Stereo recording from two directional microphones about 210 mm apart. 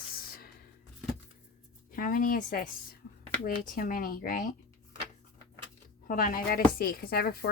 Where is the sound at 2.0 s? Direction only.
40° left (ahead or behind).